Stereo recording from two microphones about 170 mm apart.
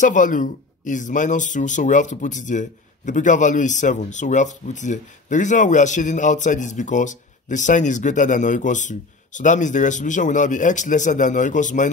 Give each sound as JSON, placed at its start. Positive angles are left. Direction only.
{"t": 0.0, "sound": "speech", "side_deg": 50}